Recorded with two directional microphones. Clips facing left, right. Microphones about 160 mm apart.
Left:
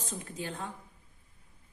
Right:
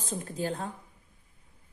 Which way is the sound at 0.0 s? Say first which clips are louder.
Right 6 dB; 35° right (ahead or behind).